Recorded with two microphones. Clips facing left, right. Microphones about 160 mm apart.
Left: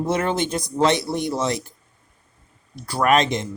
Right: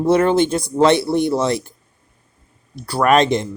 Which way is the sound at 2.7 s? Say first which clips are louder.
Right 4 dB; 35° right (ahead or behind).